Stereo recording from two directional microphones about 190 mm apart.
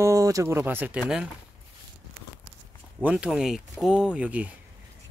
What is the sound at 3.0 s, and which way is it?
Speech, 5° right (ahead or behind).